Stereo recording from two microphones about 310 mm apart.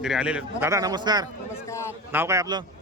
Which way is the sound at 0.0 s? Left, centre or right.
Centre.